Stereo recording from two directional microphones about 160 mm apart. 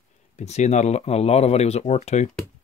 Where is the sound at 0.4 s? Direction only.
45° left (ahead or behind).